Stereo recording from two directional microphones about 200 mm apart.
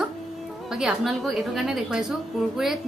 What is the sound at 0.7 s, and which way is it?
A woman's voice, 5° right (ahead or behind).